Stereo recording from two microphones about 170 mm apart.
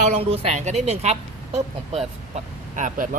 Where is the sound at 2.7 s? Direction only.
50° right (ahead or behind).